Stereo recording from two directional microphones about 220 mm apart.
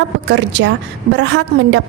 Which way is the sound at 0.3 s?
55° right (ahead or behind).